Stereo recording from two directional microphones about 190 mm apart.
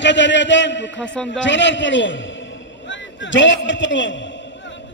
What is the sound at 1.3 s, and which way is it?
A man's voice, 70° left (ahead or behind).